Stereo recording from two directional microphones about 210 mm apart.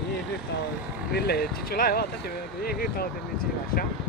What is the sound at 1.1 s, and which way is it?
Speech, 50° left (ahead or behind).